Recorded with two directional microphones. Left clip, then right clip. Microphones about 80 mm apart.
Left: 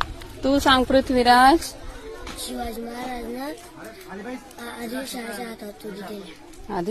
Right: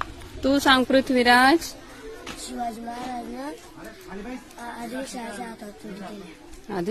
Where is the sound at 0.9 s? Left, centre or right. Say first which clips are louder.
Left 1 dB; right.